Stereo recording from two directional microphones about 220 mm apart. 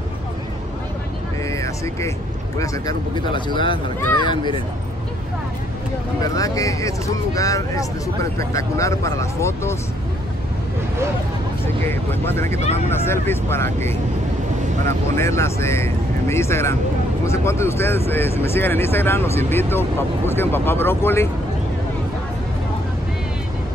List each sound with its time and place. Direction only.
1.5 s vehicle: 15° left (ahead or behind)
2.6 s speech: 15° left (ahead or behind)
6.2 s speech: 15° left (ahead or behind)
11.6 s speech: 10° left (ahead or behind)
12.5 s speech: 30° left (ahead or behind)
12.9 s speech: 10° left (ahead or behind)